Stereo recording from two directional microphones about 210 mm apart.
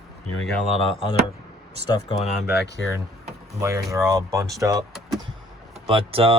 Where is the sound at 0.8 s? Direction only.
25° left (ahead or behind).